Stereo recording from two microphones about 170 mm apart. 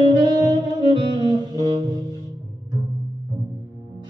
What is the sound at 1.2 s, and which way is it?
Music, 30° right (ahead or behind).